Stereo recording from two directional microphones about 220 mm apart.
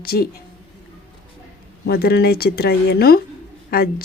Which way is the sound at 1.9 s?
45° left (ahead or behind).